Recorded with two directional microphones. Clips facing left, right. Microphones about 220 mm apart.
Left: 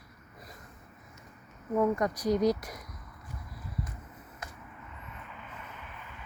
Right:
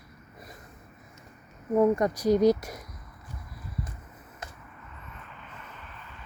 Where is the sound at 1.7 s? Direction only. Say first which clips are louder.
Right 5 dB; 30° right (ahead or behind).